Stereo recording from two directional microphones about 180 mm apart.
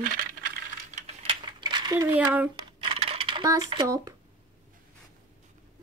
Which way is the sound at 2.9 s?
30° right (ahead or behind).